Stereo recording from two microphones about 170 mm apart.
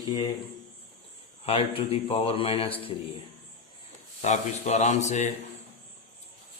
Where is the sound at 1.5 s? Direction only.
35° left (ahead or behind).